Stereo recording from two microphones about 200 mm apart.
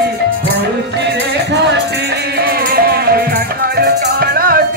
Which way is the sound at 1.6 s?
60° right (ahead or behind).